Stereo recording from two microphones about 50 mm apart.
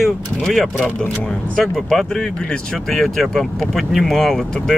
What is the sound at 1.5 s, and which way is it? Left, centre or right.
Speech, centre.